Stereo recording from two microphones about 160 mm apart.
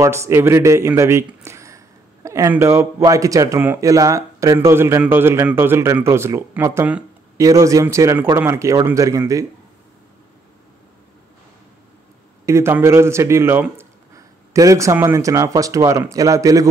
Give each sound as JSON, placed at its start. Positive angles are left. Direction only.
{"t": 0.0, "sound": "speech", "side_deg": -15}
{"t": 12.4, "sound": "speech", "side_deg": -15}